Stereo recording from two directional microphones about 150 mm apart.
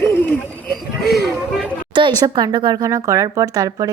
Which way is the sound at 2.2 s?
30° right (ahead or behind).